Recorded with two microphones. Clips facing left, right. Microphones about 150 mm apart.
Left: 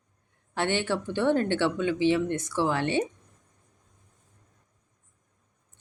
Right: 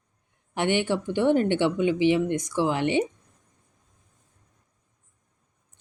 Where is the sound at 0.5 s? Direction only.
15° right (ahead or behind).